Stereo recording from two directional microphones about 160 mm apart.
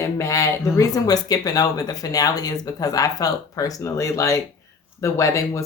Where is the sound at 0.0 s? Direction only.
20° left (ahead or behind).